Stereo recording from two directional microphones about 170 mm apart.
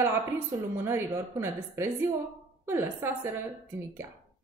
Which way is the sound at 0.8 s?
15° right (ahead or behind).